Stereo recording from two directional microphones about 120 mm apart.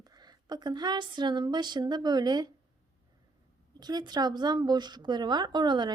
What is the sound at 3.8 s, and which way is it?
A woman's voice, 35° right (ahead or behind).